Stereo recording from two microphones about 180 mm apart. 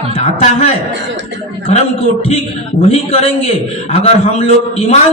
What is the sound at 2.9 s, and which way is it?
A man's voice, 35° left (ahead or behind).